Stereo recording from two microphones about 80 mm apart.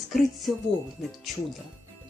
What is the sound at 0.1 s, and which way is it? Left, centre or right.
Speech, centre.